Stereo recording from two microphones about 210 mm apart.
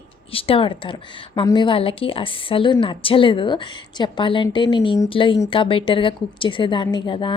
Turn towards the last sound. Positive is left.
turn(degrees=25)  # may be behind; listen again after turning